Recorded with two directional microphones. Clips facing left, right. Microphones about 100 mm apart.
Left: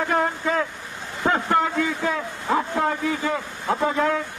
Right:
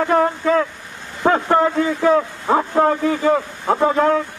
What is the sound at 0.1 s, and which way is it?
A man's voice, 40° right (ahead or behind).